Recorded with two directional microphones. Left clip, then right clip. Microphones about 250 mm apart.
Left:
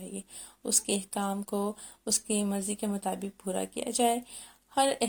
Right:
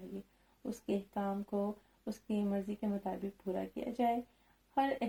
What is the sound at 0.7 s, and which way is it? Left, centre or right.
Speech, left.